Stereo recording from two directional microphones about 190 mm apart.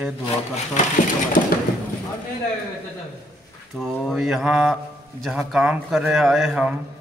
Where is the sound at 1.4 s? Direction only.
55° left (ahead or behind).